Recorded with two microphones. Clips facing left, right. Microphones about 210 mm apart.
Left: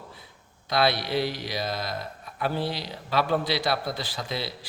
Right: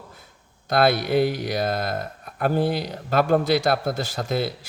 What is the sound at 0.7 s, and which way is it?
Speech, 50° right (ahead or behind).